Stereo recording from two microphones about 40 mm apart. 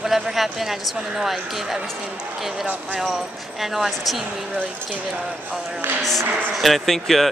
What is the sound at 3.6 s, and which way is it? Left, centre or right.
Speech, centre.